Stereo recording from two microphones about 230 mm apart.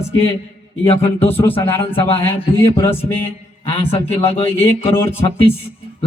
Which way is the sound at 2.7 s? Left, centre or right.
Centre.